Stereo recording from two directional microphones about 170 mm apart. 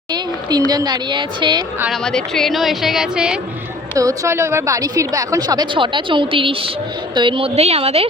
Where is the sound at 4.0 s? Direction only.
15° right (ahead or behind).